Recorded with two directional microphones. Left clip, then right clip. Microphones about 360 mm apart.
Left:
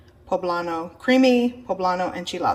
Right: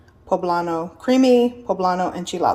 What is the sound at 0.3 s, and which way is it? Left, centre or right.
Speech, centre.